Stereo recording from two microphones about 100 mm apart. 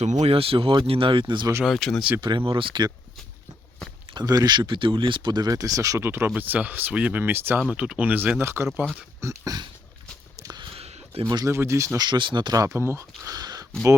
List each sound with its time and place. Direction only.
0.0 s speech: 85° right; by 1.5 s 55° right (ahead or behind)
1.6 s speech: 5° left (ahead or behind)
2.2 s speech: 55° right (ahead or behind)
4.1 s speech: 45° right (ahead or behind)
6.0 s speech: 25° right (ahead or behind)
7.7 s speech: 10° right (ahead or behind)
9.2 s speech: 35° right (ahead or behind)
10.4 s a sound: 45° right (ahead or behind)
10.8 s a sound: 90° right
11.4 s speech: 30° right (ahead or behind)
12.0 s speech: 50° right (ahead or behind)
12.5 s speech: 30° right (ahead or behind)